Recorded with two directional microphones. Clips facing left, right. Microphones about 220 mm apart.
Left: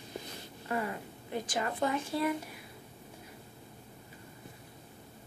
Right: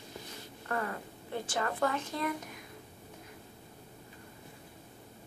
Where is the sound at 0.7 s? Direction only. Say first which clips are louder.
Left 1 dB; 15° left (ahead or behind).